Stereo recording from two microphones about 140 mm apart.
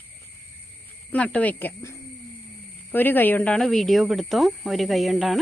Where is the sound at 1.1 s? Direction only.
10° left (ahead or behind).